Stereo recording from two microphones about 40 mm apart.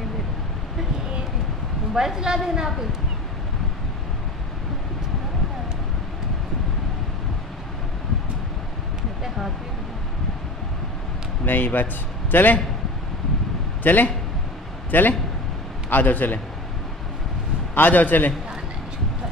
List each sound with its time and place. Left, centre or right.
2.0 s a woman's voice: centre
11.4 s a man's voice: left
13.8 s a man's voice: left
17.7 s a man's voice: left